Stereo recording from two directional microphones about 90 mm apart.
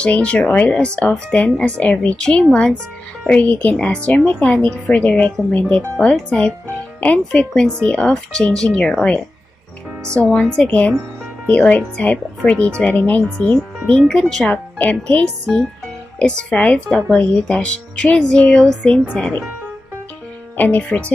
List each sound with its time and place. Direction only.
0.0 s speech: 10° left (ahead or behind)
7.0 s speech: 15° left (ahead or behind)
10.0 s speech: 35° right (ahead or behind)
10.3 s speech: 10° left (ahead or behind)
15.2 s speech: 5° left (ahead or behind)
20.5 s speech: 20° left (ahead or behind)